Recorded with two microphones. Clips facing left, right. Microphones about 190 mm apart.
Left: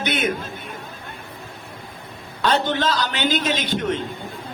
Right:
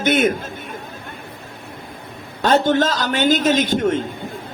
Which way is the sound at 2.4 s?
45° right (ahead or behind).